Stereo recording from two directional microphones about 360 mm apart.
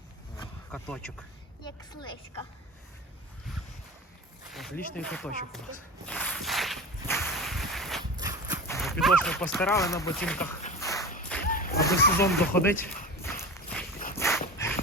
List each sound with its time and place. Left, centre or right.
0.3 s a sound: centre
4.9 s speech: centre
6.1 s walk: centre
8.1 s clip-clop: centre
8.6 s speech: centre
10.6 s a sound: centre
11.4 s a sound: left
11.8 s speech: centre
13.2 s walk: centre
14.2 s dog: centre